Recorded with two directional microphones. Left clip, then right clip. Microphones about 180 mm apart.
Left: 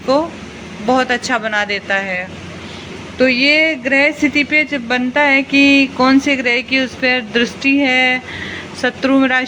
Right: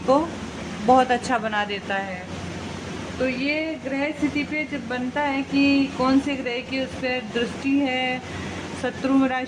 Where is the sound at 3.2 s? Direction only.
30° left (ahead or behind).